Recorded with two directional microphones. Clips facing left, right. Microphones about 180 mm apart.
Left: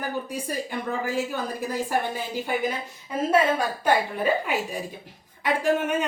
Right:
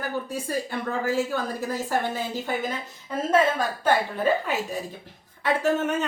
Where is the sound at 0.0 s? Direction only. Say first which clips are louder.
Even; 15° left (ahead or behind).